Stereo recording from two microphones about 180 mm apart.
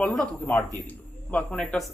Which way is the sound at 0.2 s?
10° left (ahead or behind).